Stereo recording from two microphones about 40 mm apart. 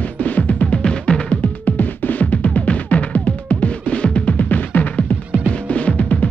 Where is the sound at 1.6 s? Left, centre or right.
Left.